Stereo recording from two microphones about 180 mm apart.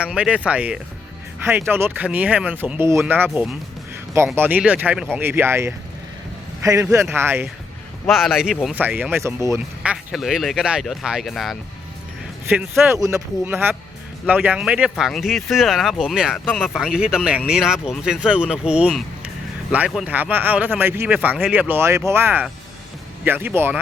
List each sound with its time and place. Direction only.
0.0 s speech: 5° right (ahead or behind)
3.2 s a man's voice: centre (ahead or behind)
8.0 s speech: centre (ahead or behind)
9.9 s speech: centre (ahead or behind)
12.9 s speech: 15° right (ahead or behind)